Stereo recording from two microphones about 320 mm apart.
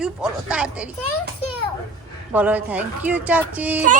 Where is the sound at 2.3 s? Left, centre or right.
Centre.